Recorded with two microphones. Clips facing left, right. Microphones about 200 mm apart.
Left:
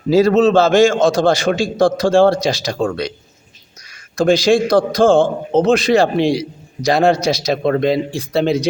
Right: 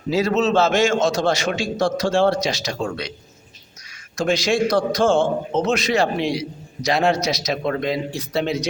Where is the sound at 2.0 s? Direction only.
50° left (ahead or behind).